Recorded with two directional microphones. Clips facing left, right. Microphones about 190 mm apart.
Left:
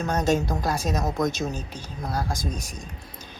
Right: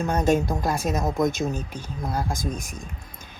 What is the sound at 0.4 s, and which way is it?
Speech, 20° right (ahead or behind).